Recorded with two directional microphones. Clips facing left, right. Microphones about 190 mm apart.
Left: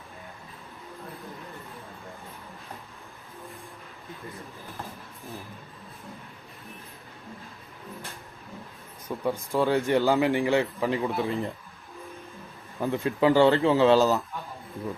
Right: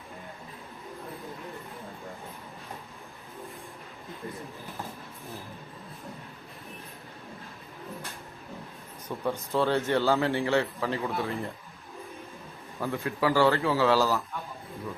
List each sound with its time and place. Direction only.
9.0 s a man's voice: 10° left (ahead or behind)
12.8 s speech: 15° left (ahead or behind)